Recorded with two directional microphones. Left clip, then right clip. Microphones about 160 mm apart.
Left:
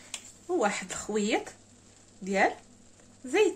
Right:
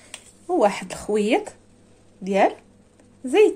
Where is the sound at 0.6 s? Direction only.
45° right (ahead or behind).